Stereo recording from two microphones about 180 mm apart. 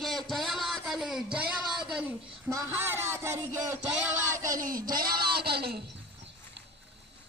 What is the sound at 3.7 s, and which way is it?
A man's voice, 40° right (ahead or behind).